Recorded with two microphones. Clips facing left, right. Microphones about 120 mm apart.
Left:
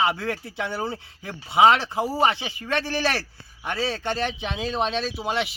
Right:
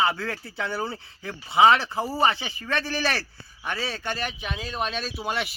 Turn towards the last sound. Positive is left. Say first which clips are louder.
# left 3 dB
turn(degrees=25)  # may be behind; listen again after turning